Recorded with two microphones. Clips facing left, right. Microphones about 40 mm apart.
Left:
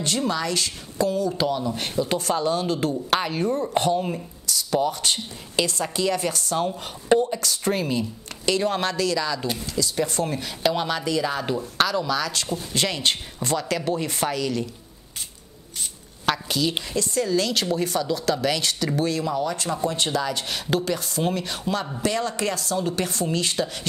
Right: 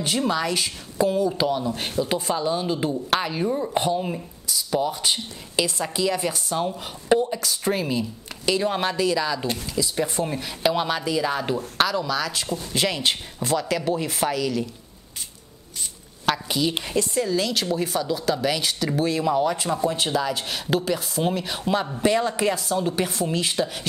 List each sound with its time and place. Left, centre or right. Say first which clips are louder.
0.0 s speech: right 1 dB; centre
3.1 s a woman's voice: even; centre
16.4 s a sound: even; centre
16.8 s speech: right 2 dB; right
17.2 s speech: left 3 dB; centre